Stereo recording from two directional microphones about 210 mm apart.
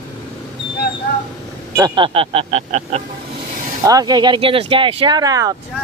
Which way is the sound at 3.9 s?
20° right (ahead or behind).